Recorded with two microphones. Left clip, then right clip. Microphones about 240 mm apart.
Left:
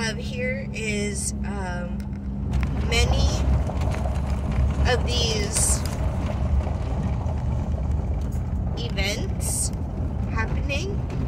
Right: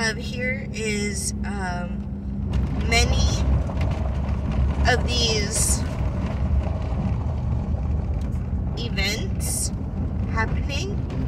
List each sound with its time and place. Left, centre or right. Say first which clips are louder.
0.0 s speech: right 2 dB; centre
2.9 s speech: right 2 dB; centre
4.8 s speech: right 2 dB; centre
8.9 s vehicle: right 2 dB; centre
10.3 s a woman's voice: right 1 dB; centre